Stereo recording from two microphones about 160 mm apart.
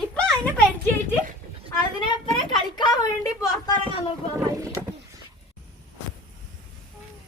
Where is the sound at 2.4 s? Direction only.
30° left (ahead or behind).